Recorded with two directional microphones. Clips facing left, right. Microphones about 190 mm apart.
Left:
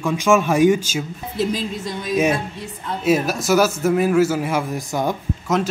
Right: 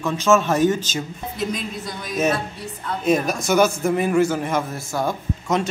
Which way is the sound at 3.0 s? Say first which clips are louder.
Left 1 dB; 5° left (ahead or behind).